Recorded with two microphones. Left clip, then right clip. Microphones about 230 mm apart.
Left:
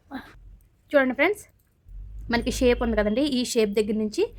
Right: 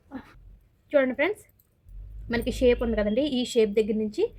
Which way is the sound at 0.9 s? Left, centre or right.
Left.